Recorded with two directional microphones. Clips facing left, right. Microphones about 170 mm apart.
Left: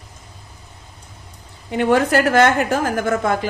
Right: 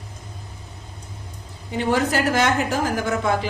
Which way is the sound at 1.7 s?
60° left (ahead or behind).